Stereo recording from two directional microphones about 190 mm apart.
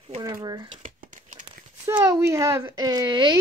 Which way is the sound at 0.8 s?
45° right (ahead or behind).